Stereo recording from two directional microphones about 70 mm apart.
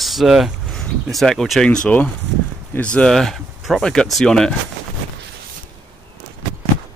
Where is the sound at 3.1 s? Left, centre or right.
Centre.